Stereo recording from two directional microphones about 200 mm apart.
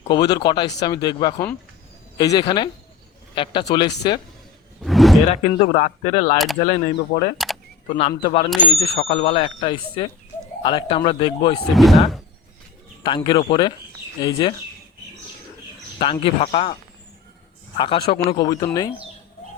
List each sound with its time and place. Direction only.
0.1 s speech: 20° left (ahead or behind)
4.8 s a sound: centre (ahead or behind)
5.3 s speech: 35° left (ahead or behind)
7.3 s camera: centre (ahead or behind)
7.9 s speech: 25° left (ahead or behind)
11.7 s speech: centre (ahead or behind)
13.0 s speech: 20° left (ahead or behind)
16.2 s speech: 30° left (ahead or behind)
17.7 s speech: 25° left (ahead or behind)